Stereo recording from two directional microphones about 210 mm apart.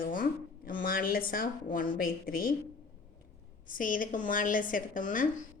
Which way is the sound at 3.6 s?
40° left (ahead or behind).